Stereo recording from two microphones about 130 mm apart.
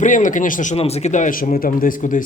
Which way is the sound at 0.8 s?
55° left (ahead or behind).